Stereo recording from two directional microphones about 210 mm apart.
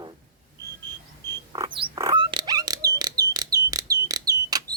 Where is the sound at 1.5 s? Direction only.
20° right (ahead or behind).